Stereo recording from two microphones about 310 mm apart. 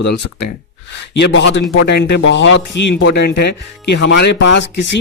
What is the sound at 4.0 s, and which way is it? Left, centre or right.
Speech, left.